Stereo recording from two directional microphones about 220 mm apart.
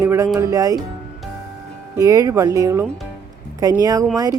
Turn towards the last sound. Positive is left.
turn(degrees=-15)  # may be behind; listen again after turning